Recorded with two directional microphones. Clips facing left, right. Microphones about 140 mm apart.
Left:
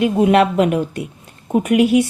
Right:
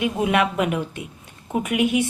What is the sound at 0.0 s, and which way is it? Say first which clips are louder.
Speech: left 7 dB; 45° left (ahead or behind).